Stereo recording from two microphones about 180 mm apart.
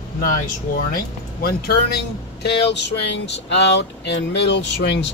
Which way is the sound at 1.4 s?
60° left (ahead or behind).